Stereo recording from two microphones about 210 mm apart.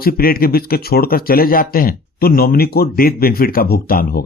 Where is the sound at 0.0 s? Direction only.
45° left (ahead or behind).